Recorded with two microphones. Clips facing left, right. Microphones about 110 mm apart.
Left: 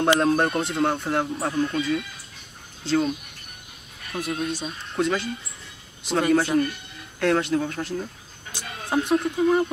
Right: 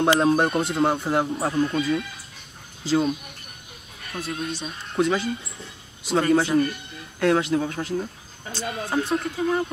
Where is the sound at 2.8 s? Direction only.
5° right (ahead or behind).